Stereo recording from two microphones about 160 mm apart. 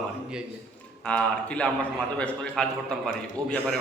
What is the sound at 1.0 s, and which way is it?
A man's voice, 5° left (ahead or behind).